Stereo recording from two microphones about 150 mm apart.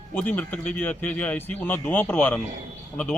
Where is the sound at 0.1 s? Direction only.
10° left (ahead or behind).